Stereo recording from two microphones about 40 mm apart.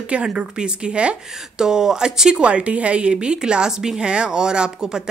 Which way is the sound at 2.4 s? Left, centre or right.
Right.